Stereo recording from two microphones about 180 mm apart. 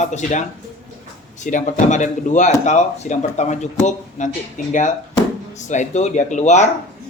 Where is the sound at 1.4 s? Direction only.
45° left (ahead or behind).